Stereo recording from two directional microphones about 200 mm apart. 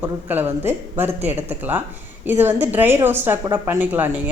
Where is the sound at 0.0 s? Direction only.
10° right (ahead or behind).